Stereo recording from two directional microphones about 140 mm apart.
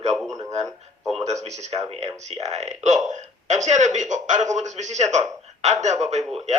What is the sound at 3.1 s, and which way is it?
A man's voice, 60° right (ahead or behind).